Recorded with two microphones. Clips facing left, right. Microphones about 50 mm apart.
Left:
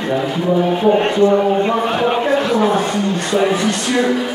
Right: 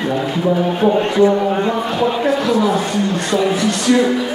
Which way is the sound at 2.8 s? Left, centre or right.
Left.